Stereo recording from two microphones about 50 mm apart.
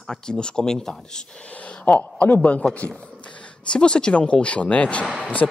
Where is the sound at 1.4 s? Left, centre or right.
Left.